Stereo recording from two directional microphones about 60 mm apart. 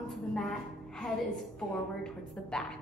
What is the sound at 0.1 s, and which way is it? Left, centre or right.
Music, centre.